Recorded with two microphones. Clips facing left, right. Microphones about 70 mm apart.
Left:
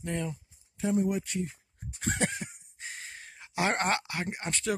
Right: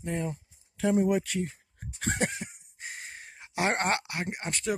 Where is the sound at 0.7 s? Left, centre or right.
Right.